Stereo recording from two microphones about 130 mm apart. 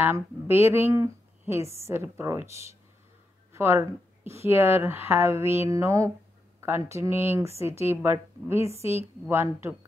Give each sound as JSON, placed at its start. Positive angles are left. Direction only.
{"t": 0.0, "sound": "speech", "side_deg": -20}